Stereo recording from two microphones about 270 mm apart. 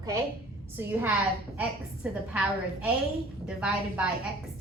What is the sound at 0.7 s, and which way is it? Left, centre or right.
A woman's voice, centre.